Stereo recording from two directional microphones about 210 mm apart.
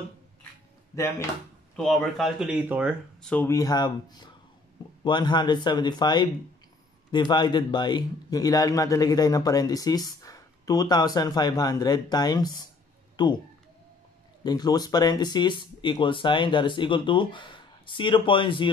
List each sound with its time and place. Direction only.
1.8 s speech: centre (ahead or behind)
3.3 s a man's voice: 10° left (ahead or behind)
14.4 s speech: 20° left (ahead or behind)